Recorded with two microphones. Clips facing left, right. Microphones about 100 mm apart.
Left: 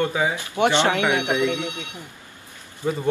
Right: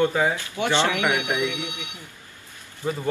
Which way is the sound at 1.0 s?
20° left (ahead or behind).